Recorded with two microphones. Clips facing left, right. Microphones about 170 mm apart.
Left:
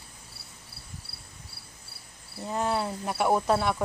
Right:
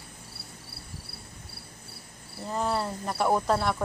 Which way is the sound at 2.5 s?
5° left (ahead or behind).